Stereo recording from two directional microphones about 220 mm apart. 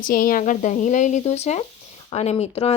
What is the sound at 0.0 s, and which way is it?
A woman's voice, 40° left (ahead or behind).